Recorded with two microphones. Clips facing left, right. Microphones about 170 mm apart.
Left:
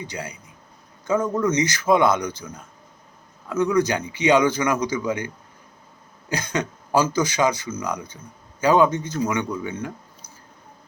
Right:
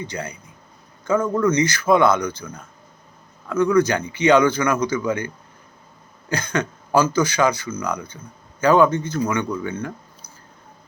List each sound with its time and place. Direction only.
0.0 s speech: 15° left (ahead or behind)